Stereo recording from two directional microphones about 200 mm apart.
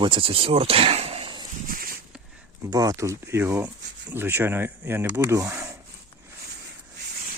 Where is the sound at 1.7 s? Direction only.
45° right (ahead or behind).